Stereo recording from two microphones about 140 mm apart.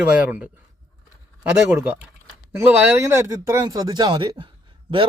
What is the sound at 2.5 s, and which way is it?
A man's voice, 20° right (ahead or behind).